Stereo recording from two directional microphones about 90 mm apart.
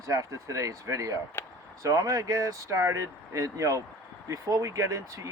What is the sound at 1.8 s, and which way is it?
Speech, 40° right (ahead or behind).